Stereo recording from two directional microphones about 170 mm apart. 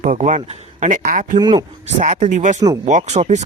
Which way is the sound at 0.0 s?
45° right (ahead or behind).